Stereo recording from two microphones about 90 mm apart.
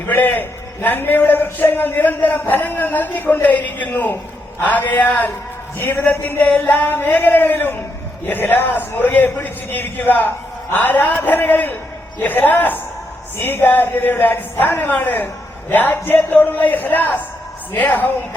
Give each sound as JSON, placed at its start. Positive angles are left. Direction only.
{"t": 0.1, "sound": "a man's voice", "side_deg": 25}